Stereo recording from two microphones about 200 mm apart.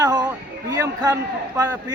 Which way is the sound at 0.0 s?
20° right (ahead or behind).